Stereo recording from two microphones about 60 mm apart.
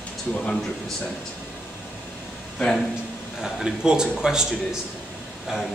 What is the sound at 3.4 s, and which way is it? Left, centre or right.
A man's voice, centre.